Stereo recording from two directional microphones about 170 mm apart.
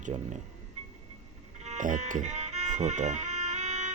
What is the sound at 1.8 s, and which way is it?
Speech, 50° right (ahead or behind).